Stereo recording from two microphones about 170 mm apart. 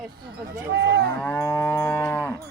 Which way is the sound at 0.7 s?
65° right (ahead or behind).